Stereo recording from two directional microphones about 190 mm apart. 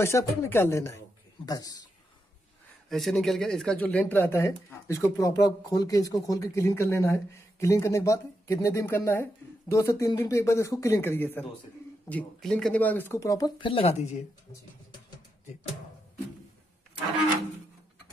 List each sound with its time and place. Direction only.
0.0 s speech: 10° left (ahead or behind)
2.9 s speech: centre (ahead or behind); by 14.2 s 35° left (ahead or behind)